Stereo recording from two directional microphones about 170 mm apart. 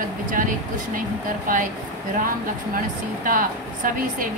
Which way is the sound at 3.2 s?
55° right (ahead or behind).